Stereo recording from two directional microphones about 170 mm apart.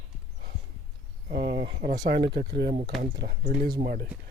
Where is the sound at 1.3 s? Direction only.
60° right (ahead or behind).